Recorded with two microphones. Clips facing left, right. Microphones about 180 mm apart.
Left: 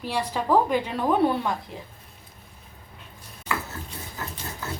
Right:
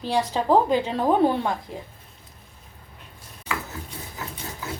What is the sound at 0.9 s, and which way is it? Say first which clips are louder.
Speech: right 2 dB; 35° right (ahead or behind).